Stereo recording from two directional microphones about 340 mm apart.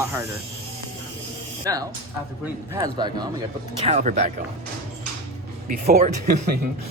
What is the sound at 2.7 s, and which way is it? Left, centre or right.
Speech, centre.